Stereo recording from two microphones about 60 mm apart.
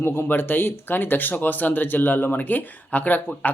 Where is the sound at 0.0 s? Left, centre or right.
Left.